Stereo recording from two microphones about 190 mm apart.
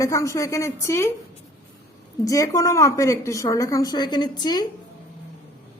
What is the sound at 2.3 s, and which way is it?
A woman's voice, 15° left (ahead or behind).